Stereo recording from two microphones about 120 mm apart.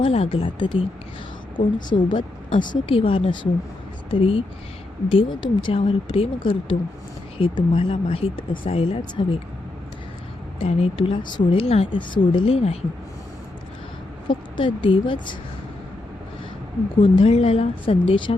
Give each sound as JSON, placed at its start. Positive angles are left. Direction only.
{"t": 0.0, "sound": "speech", "side_deg": 50}
{"t": 1.9, "sound": "a woman's voice", "side_deg": 40}
{"t": 10.6, "sound": "speech", "side_deg": 55}
{"t": 11.7, "sound": "a woman's voice", "side_deg": 50}
{"t": 14.3, "sound": "speech", "side_deg": 45}
{"t": 17.0, "sound": "speech", "side_deg": 50}